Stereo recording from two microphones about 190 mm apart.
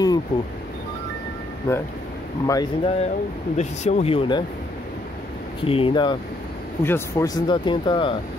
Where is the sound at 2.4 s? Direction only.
20° left (ahead or behind).